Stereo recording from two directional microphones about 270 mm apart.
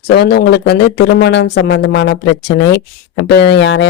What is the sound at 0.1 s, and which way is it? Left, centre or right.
Speech, left.